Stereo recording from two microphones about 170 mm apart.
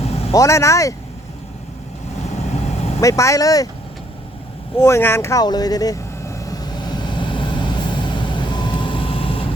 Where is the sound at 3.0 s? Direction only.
20° left (ahead or behind).